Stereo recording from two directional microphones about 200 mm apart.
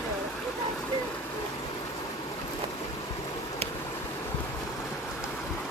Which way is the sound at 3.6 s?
30° right (ahead or behind).